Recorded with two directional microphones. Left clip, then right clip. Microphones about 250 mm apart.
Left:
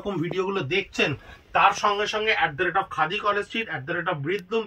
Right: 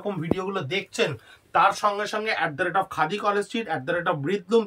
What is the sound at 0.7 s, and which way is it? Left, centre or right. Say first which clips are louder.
Speech: left 1 dB; centre.